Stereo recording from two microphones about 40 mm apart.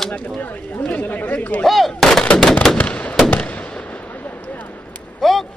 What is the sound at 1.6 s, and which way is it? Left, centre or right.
Gunshot, centre.